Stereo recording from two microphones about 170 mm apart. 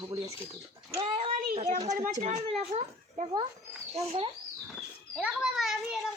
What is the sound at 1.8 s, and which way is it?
A child's voice, 45° right (ahead or behind).